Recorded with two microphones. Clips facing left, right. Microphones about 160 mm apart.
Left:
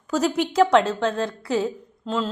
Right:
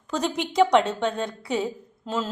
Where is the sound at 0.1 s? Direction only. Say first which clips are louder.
Left 5 dB; 5° left (ahead or behind).